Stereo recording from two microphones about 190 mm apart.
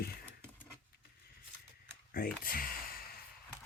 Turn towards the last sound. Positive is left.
turn(degrees=50)  # may be behind; listen again after turning